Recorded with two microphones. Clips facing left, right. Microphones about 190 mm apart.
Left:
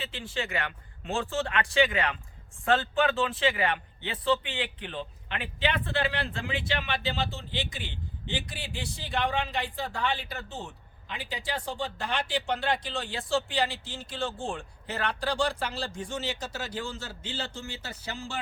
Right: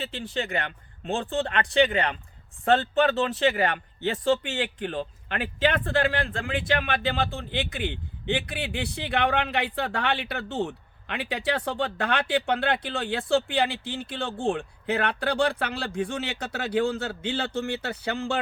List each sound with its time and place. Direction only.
0.0 s speech: 40° right (ahead or behind); by 18.3 s 60° right (ahead or behind)